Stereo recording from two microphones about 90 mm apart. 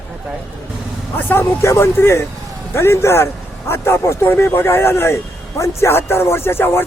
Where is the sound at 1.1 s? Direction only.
25° left (ahead or behind).